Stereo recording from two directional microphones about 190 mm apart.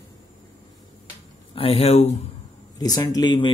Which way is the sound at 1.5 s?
30° left (ahead or behind).